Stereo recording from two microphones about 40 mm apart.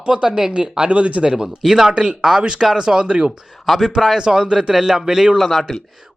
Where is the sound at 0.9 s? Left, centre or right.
Right.